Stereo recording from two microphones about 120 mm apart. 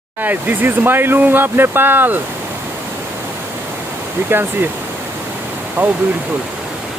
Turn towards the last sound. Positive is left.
turn(degrees=-15)  # may be behind; listen again after turning